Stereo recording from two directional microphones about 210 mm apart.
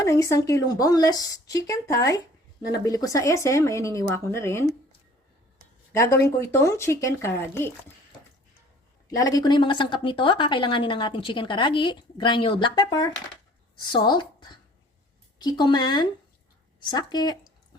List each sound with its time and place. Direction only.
0.0 s speech: 15° left (ahead or behind)
5.9 s speech: 15° left (ahead or behind)
9.0 s a woman's voice: 15° left (ahead or behind)